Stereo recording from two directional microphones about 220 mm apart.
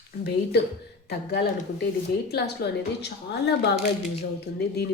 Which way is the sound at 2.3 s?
50° left (ahead or behind).